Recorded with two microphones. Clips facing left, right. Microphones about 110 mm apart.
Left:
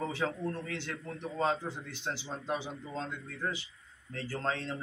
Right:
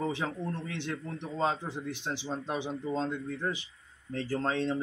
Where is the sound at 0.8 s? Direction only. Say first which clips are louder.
Right 3 dB; 20° right (ahead or behind).